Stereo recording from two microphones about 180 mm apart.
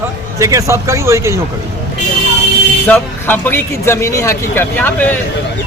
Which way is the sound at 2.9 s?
10° left (ahead or behind).